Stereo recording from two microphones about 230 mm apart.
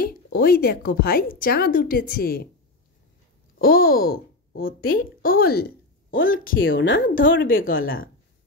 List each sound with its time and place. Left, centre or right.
0.0 s a woman's voice: left
3.6 s speech: left
7.4 s a woman's voice: left